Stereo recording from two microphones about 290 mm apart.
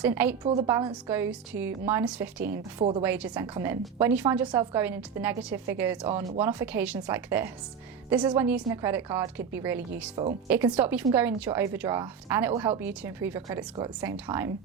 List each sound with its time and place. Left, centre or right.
0.0 s a woman's voice: centre